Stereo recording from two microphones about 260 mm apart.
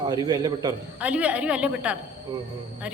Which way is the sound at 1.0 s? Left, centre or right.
Centre.